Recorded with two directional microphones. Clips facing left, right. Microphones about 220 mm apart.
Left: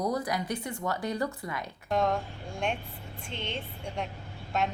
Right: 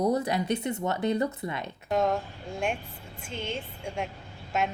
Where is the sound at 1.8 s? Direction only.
5° right (ahead or behind).